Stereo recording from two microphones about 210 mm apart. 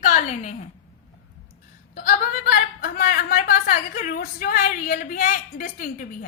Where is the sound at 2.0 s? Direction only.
45° left (ahead or behind).